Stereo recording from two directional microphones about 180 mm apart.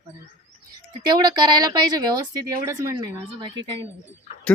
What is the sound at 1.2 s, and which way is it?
A woman's voice, 25° right (ahead or behind).